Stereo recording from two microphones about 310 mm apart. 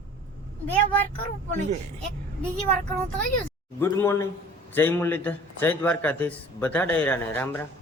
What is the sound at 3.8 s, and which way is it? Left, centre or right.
A man's voice, centre.